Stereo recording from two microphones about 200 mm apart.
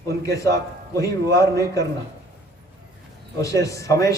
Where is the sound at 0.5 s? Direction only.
15° left (ahead or behind).